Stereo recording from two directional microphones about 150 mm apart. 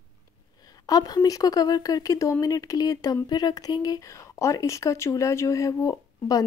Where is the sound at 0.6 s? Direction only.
25° left (ahead or behind).